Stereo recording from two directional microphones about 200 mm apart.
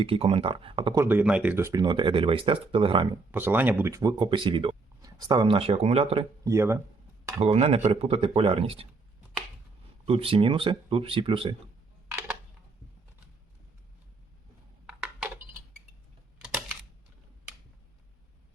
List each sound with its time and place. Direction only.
0.0 s speech: 25° right (ahead or behind)
1.0 s speech: 10° right (ahead or behind); by 3.2 s 25° right (ahead or behind)
3.3 s speech: 10° right (ahead or behind); by 6.2 s 30° right (ahead or behind)
6.4 s speech: 15° right (ahead or behind)
7.3 s speech: 30° right (ahead or behind)
10.1 s speech: 30° right (ahead or behind)
14.8 s a sound: 5° right (ahead or behind)